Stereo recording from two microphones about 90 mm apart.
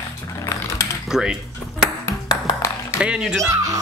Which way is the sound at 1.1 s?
5° right (ahead or behind).